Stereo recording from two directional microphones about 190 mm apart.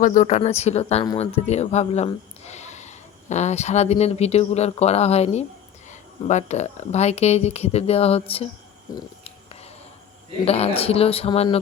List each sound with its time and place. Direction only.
0.0 s speech: 45° left (ahead or behind)
10.4 s speech: 30° left (ahead or behind)